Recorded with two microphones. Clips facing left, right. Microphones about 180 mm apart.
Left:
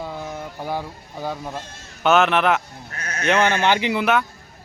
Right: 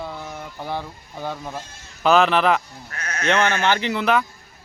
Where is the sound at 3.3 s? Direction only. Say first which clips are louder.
Left 2 dB; 15° left (ahead or behind).